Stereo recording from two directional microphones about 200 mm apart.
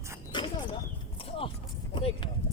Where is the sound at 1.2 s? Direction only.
25° left (ahead or behind).